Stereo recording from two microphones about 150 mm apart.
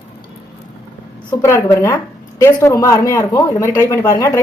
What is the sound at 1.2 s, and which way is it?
Speech, 20° left (ahead or behind).